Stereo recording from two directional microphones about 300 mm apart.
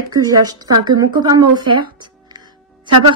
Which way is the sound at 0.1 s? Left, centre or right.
Centre.